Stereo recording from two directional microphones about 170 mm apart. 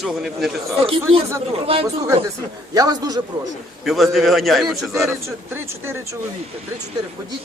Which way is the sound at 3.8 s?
Centre (ahead or behind).